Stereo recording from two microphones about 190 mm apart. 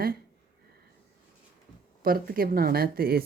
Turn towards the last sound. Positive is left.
turn(degrees=-55)  # may be behind; listen again after turning